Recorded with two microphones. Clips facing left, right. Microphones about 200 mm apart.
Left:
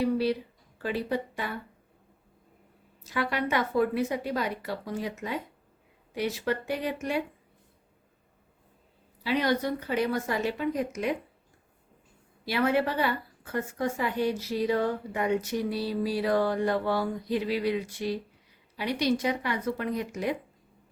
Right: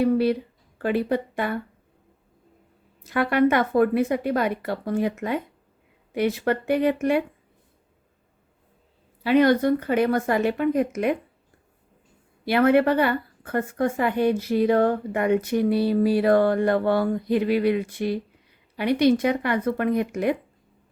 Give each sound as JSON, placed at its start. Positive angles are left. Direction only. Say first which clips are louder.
{"t": 0.0, "sound": "a woman's voice", "louder": "right 6 dB", "side_deg": -55}
{"t": 3.0, "sound": "a woman's voice", "louder": "right 10 dB", "side_deg": -55}
{"t": 9.2, "sound": "a woman's voice", "louder": "right 9 dB", "side_deg": -55}
{"t": 12.5, "sound": "a woman's voice", "louder": "right 8 dB", "side_deg": -60}